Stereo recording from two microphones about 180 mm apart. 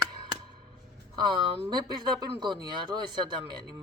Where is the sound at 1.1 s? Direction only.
25° right (ahead or behind).